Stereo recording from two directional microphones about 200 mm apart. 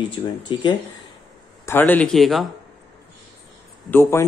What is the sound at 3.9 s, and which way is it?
Speech, 10° left (ahead or behind).